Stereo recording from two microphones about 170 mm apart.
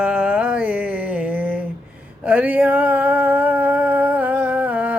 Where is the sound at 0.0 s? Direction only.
5° right (ahead or behind).